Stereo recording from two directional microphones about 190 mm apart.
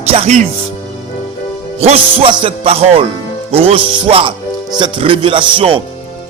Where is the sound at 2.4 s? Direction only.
30° right (ahead or behind).